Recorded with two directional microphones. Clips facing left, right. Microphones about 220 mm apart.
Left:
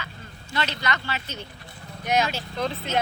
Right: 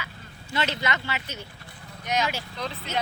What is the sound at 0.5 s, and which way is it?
Speech, 25° right (ahead or behind).